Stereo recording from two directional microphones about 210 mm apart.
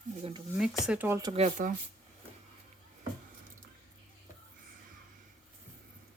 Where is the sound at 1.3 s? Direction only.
30° right (ahead or behind).